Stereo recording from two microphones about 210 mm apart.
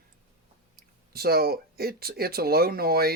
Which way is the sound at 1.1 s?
45° right (ahead or behind).